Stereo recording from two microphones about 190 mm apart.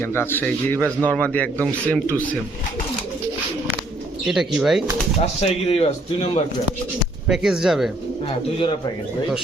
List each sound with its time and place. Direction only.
0.0 s speech: 10° left (ahead or behind)
4.3 s speech: centre (ahead or behind)
5.2 s speech: 35° left (ahead or behind)
7.3 s speech: centre (ahead or behind)